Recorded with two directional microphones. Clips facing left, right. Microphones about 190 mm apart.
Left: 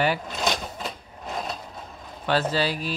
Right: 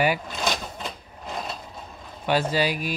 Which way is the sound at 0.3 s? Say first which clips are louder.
Left 1 dB; centre (ahead or behind).